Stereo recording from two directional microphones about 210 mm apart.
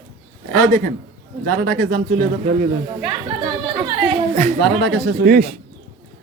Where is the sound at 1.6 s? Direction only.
45° right (ahead or behind).